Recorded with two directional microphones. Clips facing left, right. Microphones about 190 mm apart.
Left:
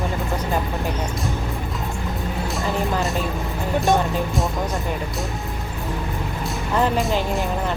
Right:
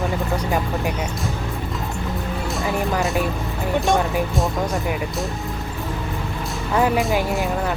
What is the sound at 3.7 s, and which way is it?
Speech, centre (ahead or behind).